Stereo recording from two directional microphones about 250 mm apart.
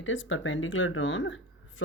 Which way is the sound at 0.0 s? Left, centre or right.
Left.